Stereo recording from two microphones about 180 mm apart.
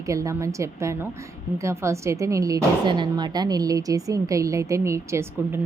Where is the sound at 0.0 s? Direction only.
15° right (ahead or behind).